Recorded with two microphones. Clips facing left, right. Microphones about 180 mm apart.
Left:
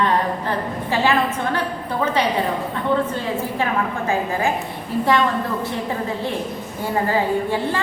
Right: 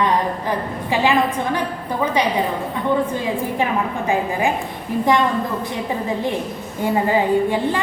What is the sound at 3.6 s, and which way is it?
Speech, 15° right (ahead or behind).